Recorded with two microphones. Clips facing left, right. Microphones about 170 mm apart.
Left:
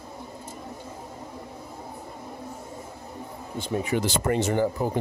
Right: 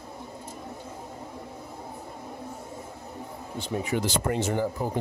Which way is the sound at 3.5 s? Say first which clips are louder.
Left 2 dB; 55° left (ahead or behind).